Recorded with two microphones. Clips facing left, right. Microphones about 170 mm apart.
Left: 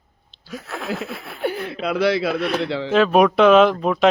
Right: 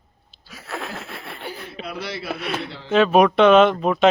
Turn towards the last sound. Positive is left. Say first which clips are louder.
# even
turn(degrees=0)  # may be behind; listen again after turning